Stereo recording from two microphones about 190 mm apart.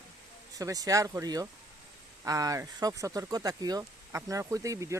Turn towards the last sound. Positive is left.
turn(degrees=-15)  # may be behind; listen again after turning